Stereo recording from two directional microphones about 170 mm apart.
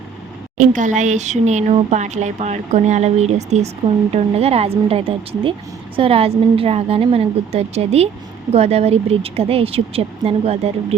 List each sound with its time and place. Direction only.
0.5 s speech: 50° right (ahead or behind)